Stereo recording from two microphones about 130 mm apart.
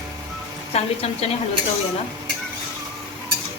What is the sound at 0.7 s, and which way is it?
Speech, 50° left (ahead or behind).